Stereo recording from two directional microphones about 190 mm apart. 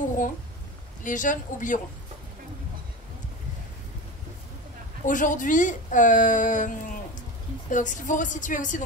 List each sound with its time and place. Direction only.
1.0 s a woman's voice: 45° left (ahead or behind)
5.0 s a woman's voice: 45° left (ahead or behind)
7.7 s speech: 40° left (ahead or behind)